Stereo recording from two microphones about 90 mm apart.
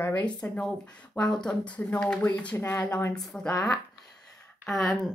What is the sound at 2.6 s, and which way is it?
Speech, 30° left (ahead or behind).